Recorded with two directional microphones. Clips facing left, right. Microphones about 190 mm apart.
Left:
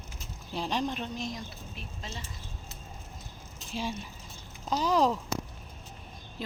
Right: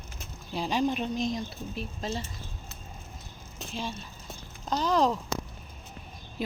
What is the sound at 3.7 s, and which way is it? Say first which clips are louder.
Speech: left 2 dB; 10° left (ahead or behind).